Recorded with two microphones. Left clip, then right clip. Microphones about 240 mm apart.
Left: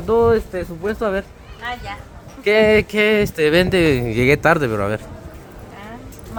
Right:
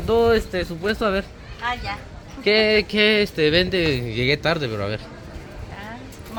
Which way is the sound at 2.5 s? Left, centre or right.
Left.